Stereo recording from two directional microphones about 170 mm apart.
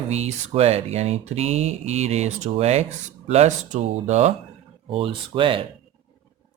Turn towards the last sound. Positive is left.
turn(degrees=-30)  # may be behind; listen again after turning